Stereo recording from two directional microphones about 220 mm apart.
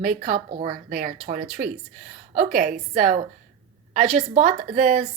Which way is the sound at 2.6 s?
40° right (ahead or behind).